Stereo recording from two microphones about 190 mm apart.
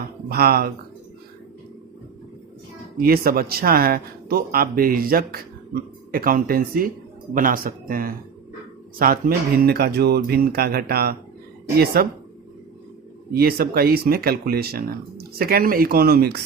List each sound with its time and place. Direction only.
0.3 s speech: 55° right (ahead or behind)
3.0 s speech: 50° right (ahead or behind)
13.3 s speech: 55° right (ahead or behind)